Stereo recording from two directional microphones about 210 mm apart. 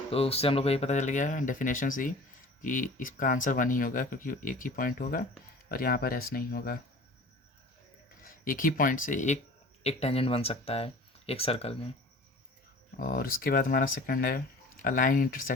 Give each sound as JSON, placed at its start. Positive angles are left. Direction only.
{"t": 0.1, "sound": "speech", "side_deg": 30}
{"t": 8.2, "sound": "speech", "side_deg": 40}
{"t": 13.0, "sound": "speech", "side_deg": 40}